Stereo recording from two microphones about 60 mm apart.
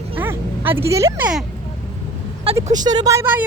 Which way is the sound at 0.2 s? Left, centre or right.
Right.